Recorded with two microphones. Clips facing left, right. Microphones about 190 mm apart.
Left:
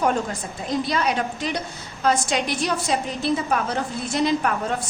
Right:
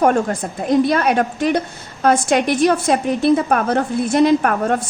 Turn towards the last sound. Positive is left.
turn(degrees=-55)  # may be behind; listen again after turning